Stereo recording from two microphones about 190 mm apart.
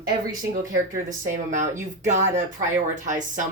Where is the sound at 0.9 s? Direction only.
45° right (ahead or behind).